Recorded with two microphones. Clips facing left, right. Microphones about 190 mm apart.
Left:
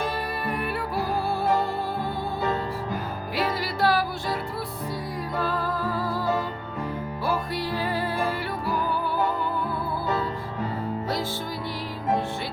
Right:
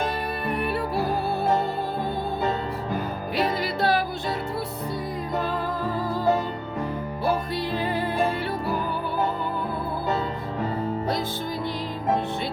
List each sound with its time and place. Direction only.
0.0 s music: 25° right (ahead or behind)
3.3 s music: 20° right (ahead or behind)
5.4 s music: 20° right (ahead or behind)